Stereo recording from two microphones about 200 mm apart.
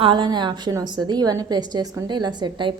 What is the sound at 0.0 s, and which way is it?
A woman's voice, 25° right (ahead or behind).